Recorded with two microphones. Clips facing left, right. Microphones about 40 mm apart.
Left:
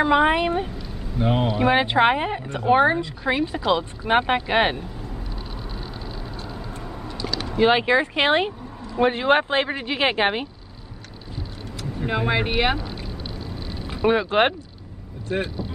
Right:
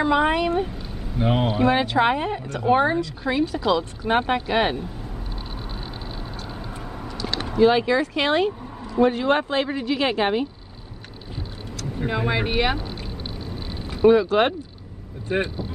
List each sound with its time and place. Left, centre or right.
0.0 s speech: centre
1.1 s speech: centre
1.6 s speech: left
7.5 s speech: left
9.0 s speech: left
12.1 s speech: centre
14.0 s speech: left
15.3 s speech: right